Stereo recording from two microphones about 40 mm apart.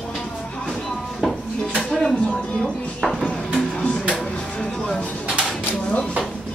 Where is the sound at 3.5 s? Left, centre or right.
Centre.